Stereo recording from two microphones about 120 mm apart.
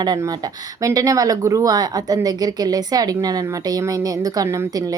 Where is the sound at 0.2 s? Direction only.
30° right (ahead or behind).